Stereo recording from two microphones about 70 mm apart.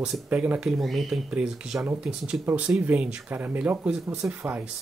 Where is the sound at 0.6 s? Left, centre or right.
Centre.